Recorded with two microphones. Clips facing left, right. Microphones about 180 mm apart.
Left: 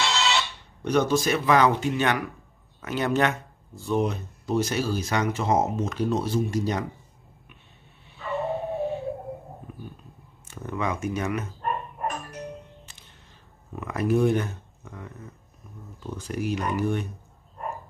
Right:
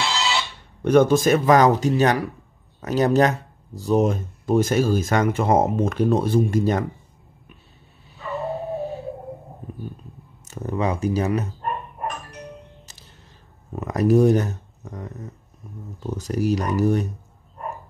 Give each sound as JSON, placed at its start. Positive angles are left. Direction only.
{"t": 0.0, "sound": "a sound", "side_deg": 0}
{"t": 0.8, "sound": "speech", "side_deg": -50}
{"t": 8.1, "sound": "dog", "side_deg": -40}
{"t": 10.4, "sound": "speech", "side_deg": -40}
{"t": 13.7, "sound": "speech", "side_deg": -40}